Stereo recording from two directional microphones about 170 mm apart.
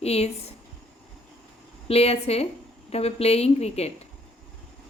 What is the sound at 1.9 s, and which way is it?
Speech, 35° left (ahead or behind).